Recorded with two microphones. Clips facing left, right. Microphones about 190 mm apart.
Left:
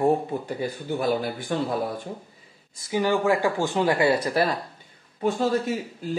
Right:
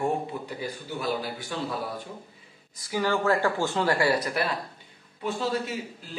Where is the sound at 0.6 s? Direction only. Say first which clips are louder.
Left 7 dB; 50° left (ahead or behind).